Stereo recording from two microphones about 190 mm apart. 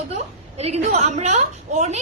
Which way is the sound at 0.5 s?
35° right (ahead or behind).